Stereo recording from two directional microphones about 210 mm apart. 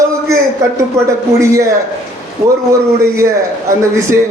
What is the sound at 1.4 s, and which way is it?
Speech, 15° right (ahead or behind).